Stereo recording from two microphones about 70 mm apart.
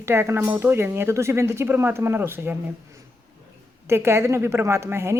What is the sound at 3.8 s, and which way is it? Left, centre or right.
Speech, right.